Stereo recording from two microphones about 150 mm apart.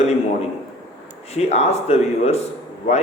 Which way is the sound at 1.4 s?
45° left (ahead or behind).